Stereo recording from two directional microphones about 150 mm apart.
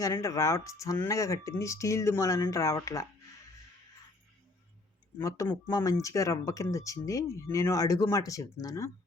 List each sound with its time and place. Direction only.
0.0 s speech: 20° left (ahead or behind)
5.1 s speech: 20° left (ahead or behind)